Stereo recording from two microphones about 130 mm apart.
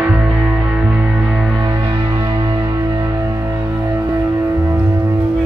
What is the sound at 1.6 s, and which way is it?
Music, 25° right (ahead or behind).